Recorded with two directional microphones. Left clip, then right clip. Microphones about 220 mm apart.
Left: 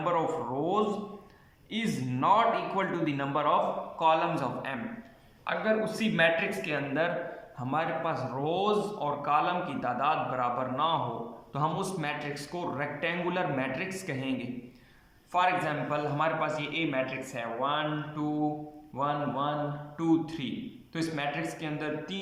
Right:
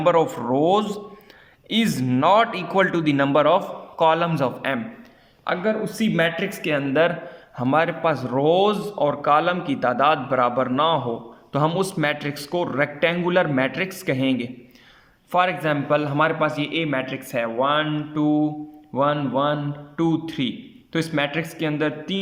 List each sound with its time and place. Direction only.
0.0 s a man's voice: 45° right (ahead or behind)